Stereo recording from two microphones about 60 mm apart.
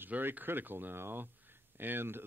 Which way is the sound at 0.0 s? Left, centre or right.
Right.